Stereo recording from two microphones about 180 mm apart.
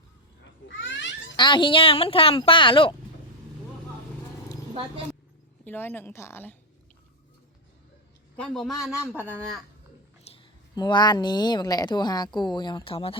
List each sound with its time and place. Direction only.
0.4 s a sound: 90° left
1.4 s a woman's voice: 25° left (ahead or behind)
4.7 s speech: 30° right (ahead or behind)
5.6 s a woman's voice: 10° left (ahead or behind)
8.4 s a man's voice: centre (ahead or behind)
10.3 s a woman's voice: 25° left (ahead or behind)